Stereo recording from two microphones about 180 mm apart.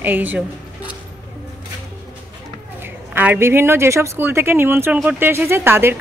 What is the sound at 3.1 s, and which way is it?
A woman's voice, 10° right (ahead or behind).